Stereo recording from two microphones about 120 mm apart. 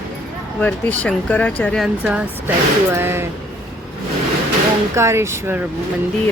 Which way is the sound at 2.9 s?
20° right (ahead or behind).